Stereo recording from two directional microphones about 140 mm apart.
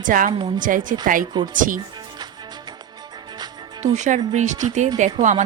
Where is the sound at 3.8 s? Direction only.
60° right (ahead or behind).